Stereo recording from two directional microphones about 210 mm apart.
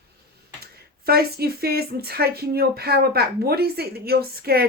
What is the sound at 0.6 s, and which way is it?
Speech, 45° right (ahead or behind).